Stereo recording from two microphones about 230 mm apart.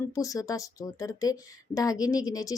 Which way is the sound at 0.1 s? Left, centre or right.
Centre.